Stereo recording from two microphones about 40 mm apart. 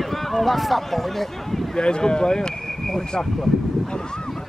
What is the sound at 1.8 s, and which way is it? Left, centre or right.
Speech, left.